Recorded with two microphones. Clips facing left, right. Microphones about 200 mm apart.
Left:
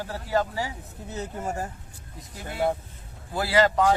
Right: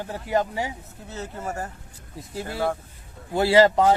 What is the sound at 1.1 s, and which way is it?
Speech, 15° left (ahead or behind).